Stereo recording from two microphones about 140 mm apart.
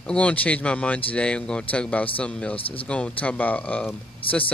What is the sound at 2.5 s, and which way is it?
Speech, 40° left (ahead or behind).